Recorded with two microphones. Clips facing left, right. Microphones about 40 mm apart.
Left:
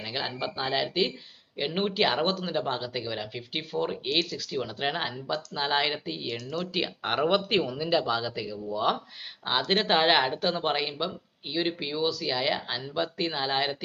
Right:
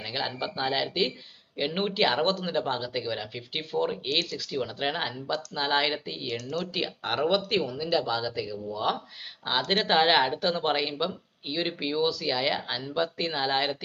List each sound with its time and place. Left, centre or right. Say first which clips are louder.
0.0 s speech: even; centre
6.3 s speech: right 4 dB; left
6.7 s speech: left 3 dB; centre